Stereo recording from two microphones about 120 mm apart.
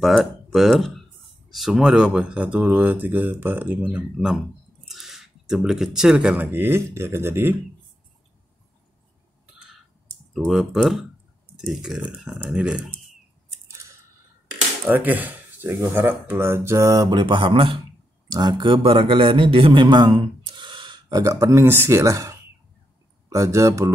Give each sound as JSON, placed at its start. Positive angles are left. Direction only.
{"t": 0.0, "sound": "speech", "side_deg": 0}
{"t": 10.3, "sound": "speech", "side_deg": 0}
{"t": 14.9, "sound": "a man's voice", "side_deg": -15}